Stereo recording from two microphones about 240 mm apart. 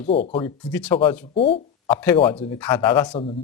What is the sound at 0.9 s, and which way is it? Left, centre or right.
Speech, left.